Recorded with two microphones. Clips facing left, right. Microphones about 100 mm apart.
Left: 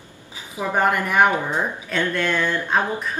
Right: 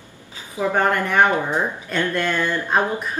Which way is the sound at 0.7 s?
10° left (ahead or behind).